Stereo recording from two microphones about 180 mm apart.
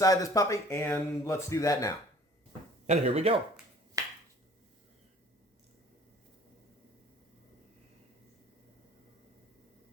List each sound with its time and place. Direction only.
0.0 s speech: 20° left (ahead or behind)
2.8 s speech: 40° right (ahead or behind)
4.0 s finger snapping: 20° right (ahead or behind)